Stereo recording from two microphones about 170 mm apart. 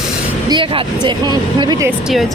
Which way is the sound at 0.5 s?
30° right (ahead or behind).